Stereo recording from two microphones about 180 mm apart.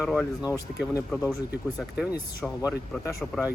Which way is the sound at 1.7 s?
Centre (ahead or behind).